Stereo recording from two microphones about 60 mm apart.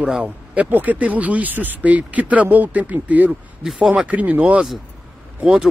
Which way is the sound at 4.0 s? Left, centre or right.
Right.